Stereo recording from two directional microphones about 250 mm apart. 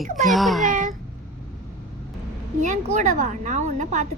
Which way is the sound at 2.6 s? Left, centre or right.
Right.